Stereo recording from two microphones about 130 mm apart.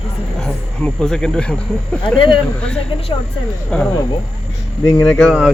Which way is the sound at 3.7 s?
5° left (ahead or behind).